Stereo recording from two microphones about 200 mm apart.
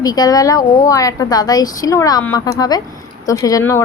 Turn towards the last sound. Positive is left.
turn(degrees=15)  # may be behind; listen again after turning